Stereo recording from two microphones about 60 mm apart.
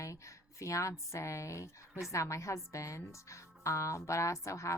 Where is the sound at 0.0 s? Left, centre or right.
Left.